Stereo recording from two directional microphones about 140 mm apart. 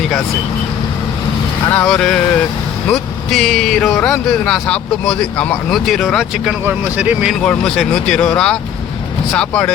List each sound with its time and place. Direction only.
1.7 s speech: 5° left (ahead or behind)
6.7 s speech: 10° right (ahead or behind)
7.4 s speech: 5° left (ahead or behind)